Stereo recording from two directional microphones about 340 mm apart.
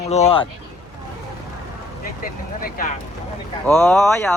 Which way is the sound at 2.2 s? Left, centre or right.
Left.